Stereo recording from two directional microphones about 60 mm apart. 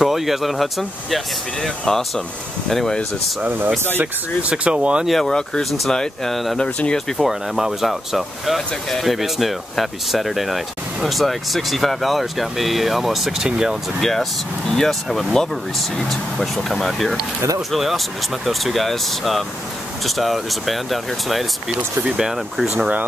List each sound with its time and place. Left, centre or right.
0.0 s speech: centre
3.4 s speech: right
4.0 s speech: right
5.0 s speech: centre
6.6 s speech: centre
7.2 s speech: centre
14.7 s speech: centre